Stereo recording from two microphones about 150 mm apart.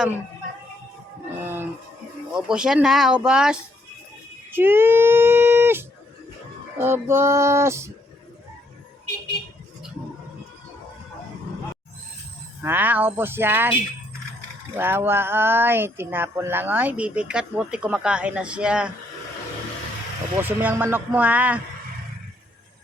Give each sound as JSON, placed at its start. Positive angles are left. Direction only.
{"t": 1.4, "sound": "music", "side_deg": -15}
{"t": 2.3, "sound": "speech", "side_deg": -5}
{"t": 12.6, "sound": "speech", "side_deg": -10}
{"t": 14.8, "sound": "speech", "side_deg": -15}
{"t": 20.4, "sound": "speech", "side_deg": -15}